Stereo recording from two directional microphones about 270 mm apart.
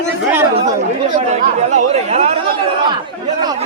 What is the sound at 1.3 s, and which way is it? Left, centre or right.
Speech, right.